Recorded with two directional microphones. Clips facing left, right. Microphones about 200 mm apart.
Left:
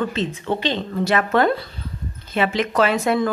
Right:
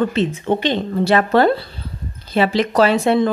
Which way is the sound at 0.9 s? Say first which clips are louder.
Right 4 dB; 30° right (ahead or behind).